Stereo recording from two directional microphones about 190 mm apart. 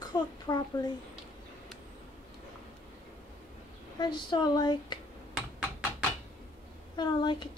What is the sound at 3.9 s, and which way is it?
A child's voice, 20° left (ahead or behind).